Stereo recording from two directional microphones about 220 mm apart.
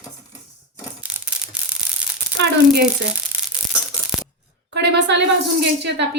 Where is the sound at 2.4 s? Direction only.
50° right (ahead or behind).